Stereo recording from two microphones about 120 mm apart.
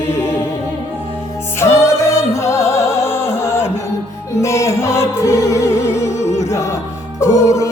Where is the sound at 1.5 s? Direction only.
25° left (ahead or behind).